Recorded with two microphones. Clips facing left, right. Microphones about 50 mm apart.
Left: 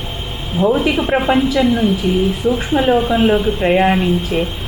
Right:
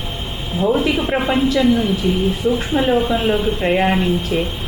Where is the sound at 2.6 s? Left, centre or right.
Centre.